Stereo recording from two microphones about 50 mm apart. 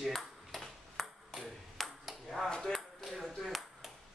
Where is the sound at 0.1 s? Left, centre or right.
Centre.